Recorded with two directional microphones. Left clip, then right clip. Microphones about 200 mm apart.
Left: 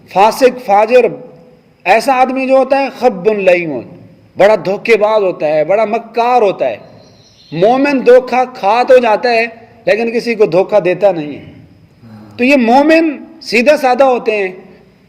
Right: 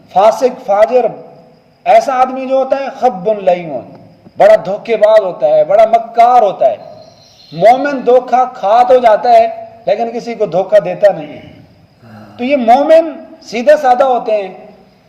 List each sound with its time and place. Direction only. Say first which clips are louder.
0.1 s a man's voice: even; 40° left (ahead or behind)
12.4 s a man's voice: even; 40° left (ahead or behind)